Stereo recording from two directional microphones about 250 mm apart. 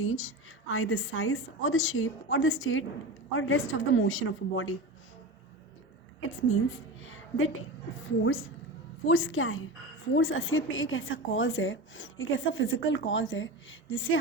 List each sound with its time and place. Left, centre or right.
0.0 s a woman's voice: left
7.0 s a sound: left
8.2 s a woman's voice: left